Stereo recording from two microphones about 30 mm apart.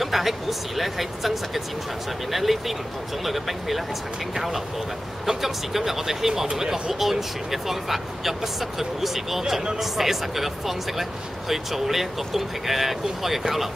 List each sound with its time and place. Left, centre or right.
0.0 s speech: centre
5.4 s speech: centre